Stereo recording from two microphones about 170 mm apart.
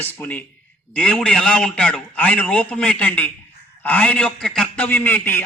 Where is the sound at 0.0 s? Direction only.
10° left (ahead or behind).